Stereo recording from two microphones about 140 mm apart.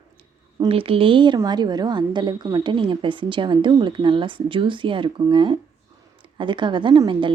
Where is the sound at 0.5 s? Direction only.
40° right (ahead or behind).